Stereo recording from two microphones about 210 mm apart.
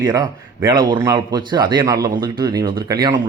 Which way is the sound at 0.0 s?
20° right (ahead or behind).